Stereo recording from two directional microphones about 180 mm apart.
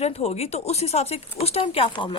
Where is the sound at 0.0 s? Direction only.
35° left (ahead or behind).